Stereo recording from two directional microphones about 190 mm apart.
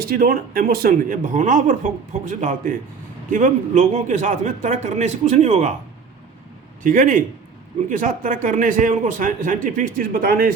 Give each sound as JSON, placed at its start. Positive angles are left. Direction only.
{"t": 0.0, "sound": "a man's voice", "side_deg": -50}
{"t": 6.8, "sound": "speech", "side_deg": -45}